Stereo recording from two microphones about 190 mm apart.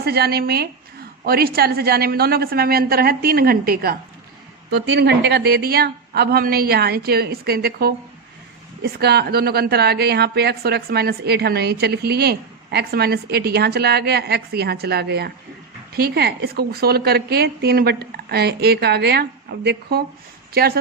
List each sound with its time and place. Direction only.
0.0 s a woman's voice: 55° right (ahead or behind)